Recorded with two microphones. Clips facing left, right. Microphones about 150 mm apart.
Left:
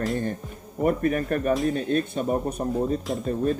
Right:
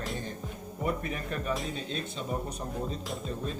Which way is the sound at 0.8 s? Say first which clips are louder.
Left 10 dB; 55° left (ahead or behind).